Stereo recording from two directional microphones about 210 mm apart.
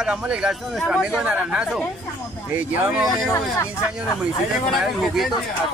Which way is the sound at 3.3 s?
15° left (ahead or behind).